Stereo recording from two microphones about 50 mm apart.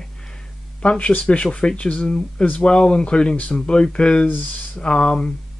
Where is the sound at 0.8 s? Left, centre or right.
Left.